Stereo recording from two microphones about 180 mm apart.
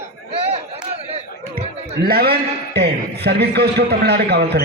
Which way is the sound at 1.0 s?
35° right (ahead or behind).